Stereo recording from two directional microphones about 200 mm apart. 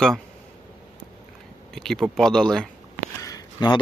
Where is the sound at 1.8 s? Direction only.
Centre (ahead or behind).